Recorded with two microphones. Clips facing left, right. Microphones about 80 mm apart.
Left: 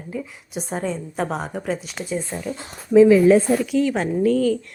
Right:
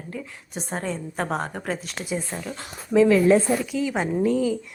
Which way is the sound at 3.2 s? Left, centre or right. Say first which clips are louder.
Left 3 dB; centre.